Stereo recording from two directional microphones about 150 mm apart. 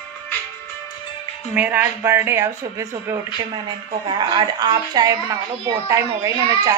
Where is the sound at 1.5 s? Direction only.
10° right (ahead or behind).